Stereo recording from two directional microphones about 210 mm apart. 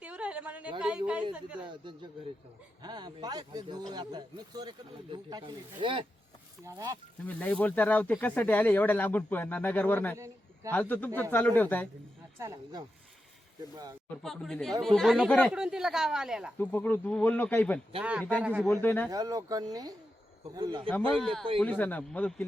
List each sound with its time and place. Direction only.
0.0 s speech: 5° right (ahead or behind)
1.7 s a man's voice: 20° right (ahead or behind)
7.3 s speech: 10° left (ahead or behind)
10.2 s a sound: 15° right (ahead or behind)
10.7 s speech: 10° left (ahead or behind)
12.4 s speech: 15° right (ahead or behind)
14.2 s speech: centre (ahead or behind)
16.6 s speech: 10° left (ahead or behind)
18.0 s speech: 5° right (ahead or behind)
18.7 s speech: 10° left (ahead or behind)
19.1 s a man's voice: 15° right (ahead or behind)
21.2 s speech: 5° left (ahead or behind)